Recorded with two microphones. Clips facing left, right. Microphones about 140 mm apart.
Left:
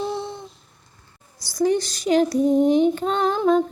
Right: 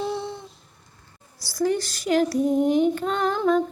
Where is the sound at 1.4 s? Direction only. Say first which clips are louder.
Left 3 dB; 20° left (ahead or behind).